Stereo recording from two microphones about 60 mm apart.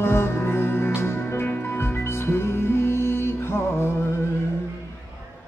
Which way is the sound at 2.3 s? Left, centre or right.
Left.